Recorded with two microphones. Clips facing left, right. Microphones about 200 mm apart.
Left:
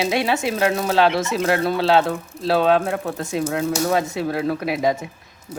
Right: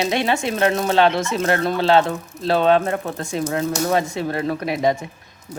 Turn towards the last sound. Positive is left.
turn(degrees=0)  # may be behind; listen again after turning